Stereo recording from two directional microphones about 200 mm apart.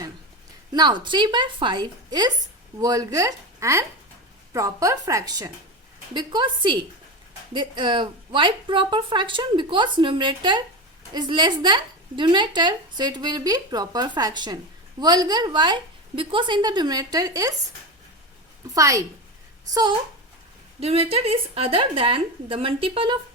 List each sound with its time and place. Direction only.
0.7 s a woman's voice: 20° right (ahead or behind)
18.7 s a woman's voice: 15° right (ahead or behind)